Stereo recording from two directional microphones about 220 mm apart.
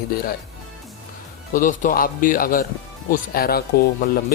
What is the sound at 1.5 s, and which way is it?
A man's voice, 35° left (ahead or behind).